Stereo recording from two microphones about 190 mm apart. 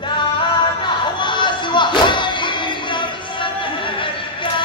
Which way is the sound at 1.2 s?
25° left (ahead or behind).